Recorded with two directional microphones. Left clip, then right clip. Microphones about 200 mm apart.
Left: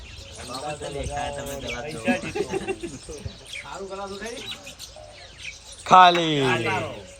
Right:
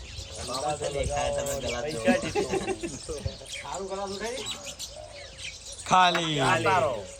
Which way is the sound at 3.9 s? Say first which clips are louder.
Right 1 dB; 30° right (ahead or behind).